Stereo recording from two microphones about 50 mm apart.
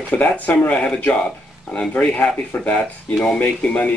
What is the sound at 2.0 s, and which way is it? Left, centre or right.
Speech, left.